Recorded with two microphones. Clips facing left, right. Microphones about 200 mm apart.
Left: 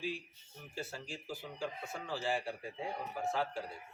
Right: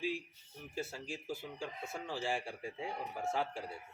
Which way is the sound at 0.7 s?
25° right (ahead or behind).